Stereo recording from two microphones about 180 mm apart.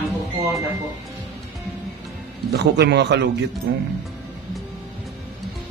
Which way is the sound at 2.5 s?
65° right (ahead or behind).